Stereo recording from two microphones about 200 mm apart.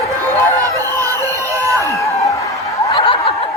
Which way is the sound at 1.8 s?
15° left (ahead or behind).